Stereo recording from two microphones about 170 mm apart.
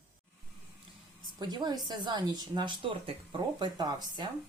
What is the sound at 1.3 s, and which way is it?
Speech, 25° right (ahead or behind).